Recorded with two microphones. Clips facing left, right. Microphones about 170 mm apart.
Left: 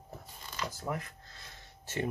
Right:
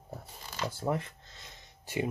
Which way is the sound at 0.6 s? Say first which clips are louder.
Right 5 dB; 30° right (ahead or behind).